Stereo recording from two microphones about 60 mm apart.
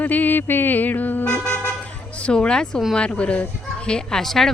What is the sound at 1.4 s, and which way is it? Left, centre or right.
Vehicle, left.